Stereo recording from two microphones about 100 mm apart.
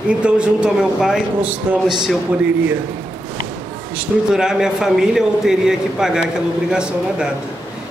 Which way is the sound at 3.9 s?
5° right (ahead or behind).